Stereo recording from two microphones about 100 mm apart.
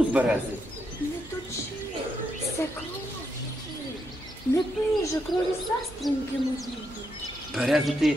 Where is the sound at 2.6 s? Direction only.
25° left (ahead or behind).